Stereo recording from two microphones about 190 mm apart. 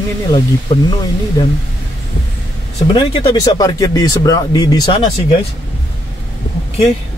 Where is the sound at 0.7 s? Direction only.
20° left (ahead or behind).